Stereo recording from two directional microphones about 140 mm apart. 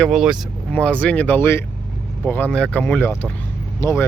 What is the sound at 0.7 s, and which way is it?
Speech, 10° left (ahead or behind).